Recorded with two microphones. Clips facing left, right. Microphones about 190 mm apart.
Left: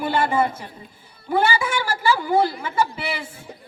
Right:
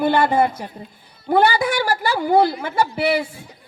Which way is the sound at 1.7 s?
70° right (ahead or behind).